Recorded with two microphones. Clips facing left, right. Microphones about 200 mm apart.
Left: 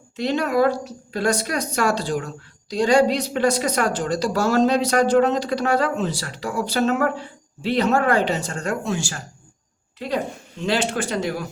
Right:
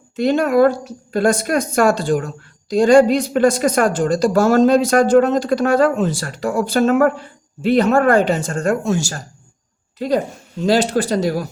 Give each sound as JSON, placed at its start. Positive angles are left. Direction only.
{"t": 0.2, "sound": "a woman's voice", "side_deg": -50}
{"t": 10.7, "sound": "speech", "side_deg": -40}